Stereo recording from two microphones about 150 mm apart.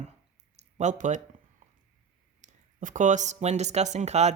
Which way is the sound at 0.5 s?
50° right (ahead or behind).